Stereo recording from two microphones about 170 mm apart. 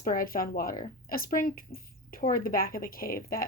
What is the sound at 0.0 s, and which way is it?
Speech, 55° left (ahead or behind).